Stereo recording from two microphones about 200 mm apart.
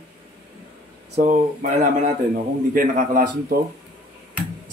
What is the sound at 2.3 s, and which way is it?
Speech, 45° right (ahead or behind).